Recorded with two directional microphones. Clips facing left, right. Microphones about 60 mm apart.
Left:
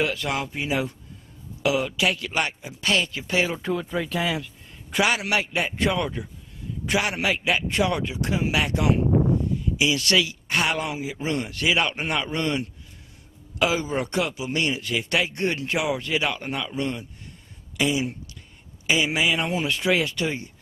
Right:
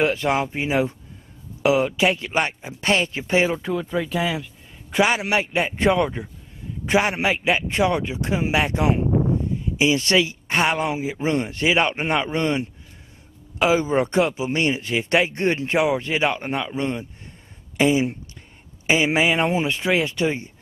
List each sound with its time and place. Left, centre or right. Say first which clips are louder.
0.0 s speech: right 5 dB; right
3.5 s speech: right 2 dB; centre
5.0 s speech: right 3 dB; centre